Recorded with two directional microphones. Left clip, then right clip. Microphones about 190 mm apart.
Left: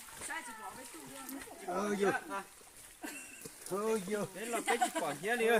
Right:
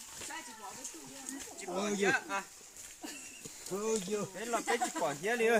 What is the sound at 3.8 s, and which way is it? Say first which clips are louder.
Speech: right 1 dB; 20° right (ahead or behind).